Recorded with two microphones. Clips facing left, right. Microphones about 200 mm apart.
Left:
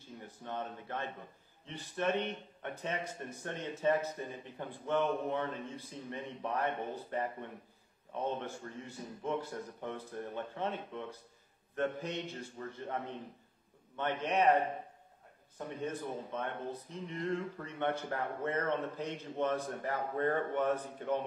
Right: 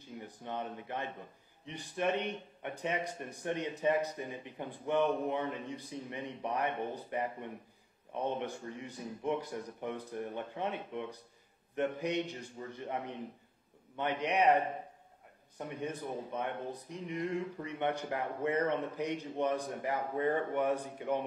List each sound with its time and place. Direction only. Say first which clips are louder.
0.0 s speech: right 2 dB; 15° right (ahead or behind)